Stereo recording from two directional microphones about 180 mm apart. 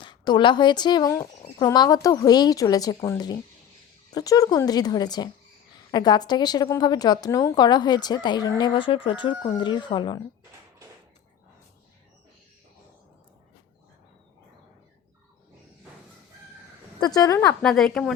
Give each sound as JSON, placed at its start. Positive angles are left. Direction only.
{"t": 0.0, "sound": "a woman's voice", "side_deg": 25}
{"t": 17.2, "sound": "a woman's voice", "side_deg": 20}
{"t": 17.6, "sound": "a woman's voice", "side_deg": 0}